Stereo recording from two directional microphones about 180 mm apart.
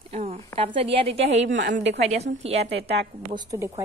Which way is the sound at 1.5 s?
80° right.